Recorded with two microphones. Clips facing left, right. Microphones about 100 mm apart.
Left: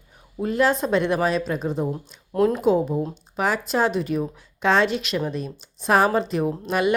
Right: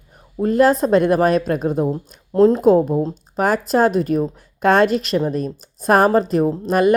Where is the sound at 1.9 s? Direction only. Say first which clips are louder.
Right 6 dB; 30° right (ahead or behind).